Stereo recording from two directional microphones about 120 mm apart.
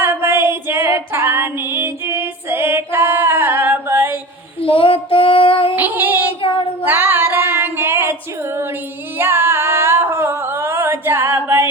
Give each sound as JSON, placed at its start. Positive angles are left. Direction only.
{"t": 0.0, "sound": "female singing", "side_deg": -20}
{"t": 4.6, "sound": "child singing", "side_deg": 50}
{"t": 5.7, "sound": "music", "side_deg": -15}
{"t": 6.4, "sound": "child singing", "side_deg": 50}
{"t": 6.8, "sound": "female singing", "side_deg": -15}
{"t": 9.1, "sound": "singing", "side_deg": -20}